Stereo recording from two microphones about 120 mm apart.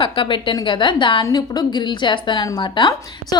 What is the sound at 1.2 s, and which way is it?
Speech, 35° left (ahead or behind).